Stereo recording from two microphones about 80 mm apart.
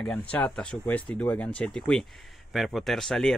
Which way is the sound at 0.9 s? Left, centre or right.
Centre.